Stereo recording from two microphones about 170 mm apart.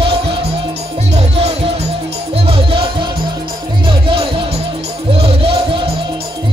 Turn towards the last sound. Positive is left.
turn(degrees=-35)  # may be behind; listen again after turning